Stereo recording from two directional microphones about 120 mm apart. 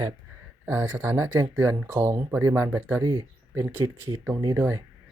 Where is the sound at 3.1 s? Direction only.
30° right (ahead or behind).